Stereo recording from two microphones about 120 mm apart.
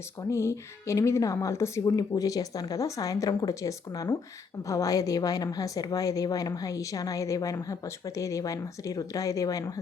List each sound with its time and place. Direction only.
0.2 s a woman's voice: 25° left (ahead or behind)